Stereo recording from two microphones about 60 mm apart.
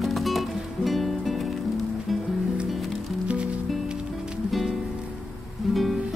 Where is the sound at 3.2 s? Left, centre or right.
Centre.